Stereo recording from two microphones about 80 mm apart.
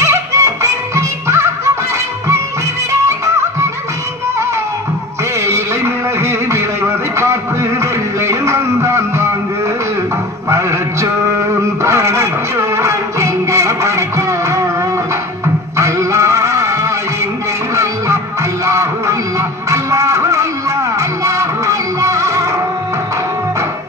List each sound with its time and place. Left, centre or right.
0.0 s music: right
2.9 s music: right
6.2 s a sound: right
7.8 s music: right
11.8 s music: right
15.8 s music: right
17.7 s music: right